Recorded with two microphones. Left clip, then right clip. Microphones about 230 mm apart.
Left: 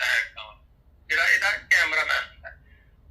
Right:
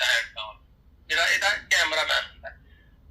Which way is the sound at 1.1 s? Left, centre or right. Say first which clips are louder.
Left 1 dB; centre.